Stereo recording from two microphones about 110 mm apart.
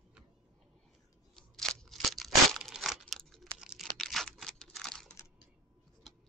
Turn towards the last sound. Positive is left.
turn(degrees=5)  # may be behind; listen again after turning